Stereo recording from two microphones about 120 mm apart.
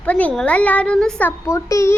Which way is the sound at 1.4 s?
25° left (ahead or behind).